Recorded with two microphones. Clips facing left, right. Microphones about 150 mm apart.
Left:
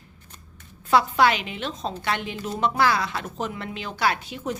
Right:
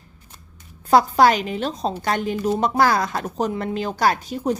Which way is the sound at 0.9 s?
40° right (ahead or behind).